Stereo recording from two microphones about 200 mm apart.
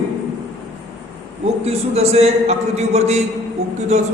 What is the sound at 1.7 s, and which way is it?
A man's voice, 30° right (ahead or behind).